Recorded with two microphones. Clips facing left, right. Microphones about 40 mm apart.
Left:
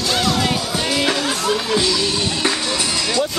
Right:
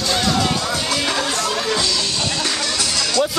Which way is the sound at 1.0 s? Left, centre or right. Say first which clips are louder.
Left 1 dB; centre.